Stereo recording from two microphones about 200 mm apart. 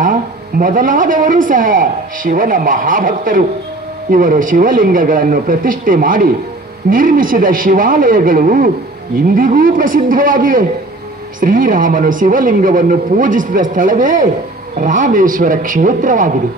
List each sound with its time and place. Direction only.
0.0 s a woman's voice: 40° right (ahead or behind)